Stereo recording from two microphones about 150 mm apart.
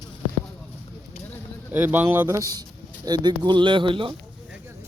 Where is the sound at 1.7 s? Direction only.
15° right (ahead or behind); by 4.1 s 35° right (ahead or behind).